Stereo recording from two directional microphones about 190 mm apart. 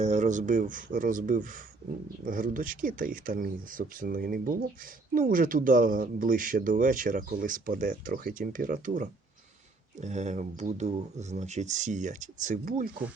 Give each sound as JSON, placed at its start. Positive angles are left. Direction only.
{"t": 0.0, "sound": "speech", "side_deg": -35}